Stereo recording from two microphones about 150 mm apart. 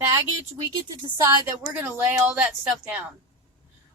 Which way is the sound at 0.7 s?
30° right (ahead or behind).